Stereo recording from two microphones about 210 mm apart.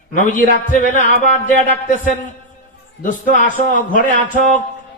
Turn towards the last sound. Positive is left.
turn(degrees=40)  # may be behind; listen again after turning